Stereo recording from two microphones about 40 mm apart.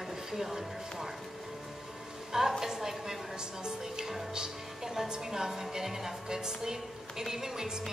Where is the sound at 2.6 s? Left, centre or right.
Centre.